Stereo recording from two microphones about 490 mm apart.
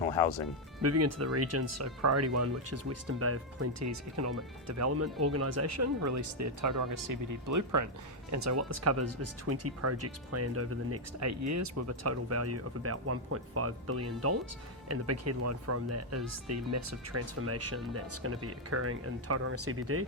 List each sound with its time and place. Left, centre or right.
0.0 s speech: left
0.8 s speech: right